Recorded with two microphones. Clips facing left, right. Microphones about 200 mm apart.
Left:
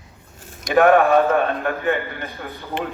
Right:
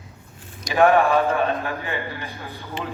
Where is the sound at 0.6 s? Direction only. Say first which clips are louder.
Left 3 dB; 55° left (ahead or behind).